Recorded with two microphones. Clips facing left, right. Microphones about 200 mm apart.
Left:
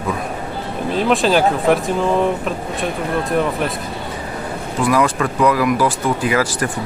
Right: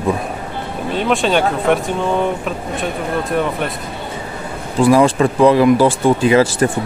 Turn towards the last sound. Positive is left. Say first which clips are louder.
# right 6 dB
turn(degrees=-25)  # may be behind; listen again after turning